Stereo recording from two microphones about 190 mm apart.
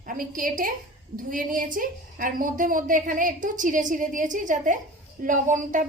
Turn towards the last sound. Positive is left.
turn(degrees=-45)  # may be behind; listen again after turning